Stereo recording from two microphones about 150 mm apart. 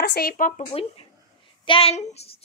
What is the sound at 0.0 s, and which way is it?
Speech, 90° left.